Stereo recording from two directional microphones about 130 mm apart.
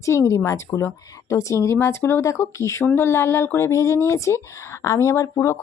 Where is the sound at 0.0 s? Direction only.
25° left (ahead or behind).